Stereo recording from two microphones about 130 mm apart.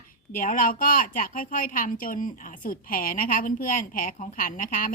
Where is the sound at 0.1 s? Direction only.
90° left.